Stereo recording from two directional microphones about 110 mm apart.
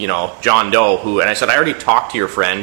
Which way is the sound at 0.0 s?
20° right (ahead or behind).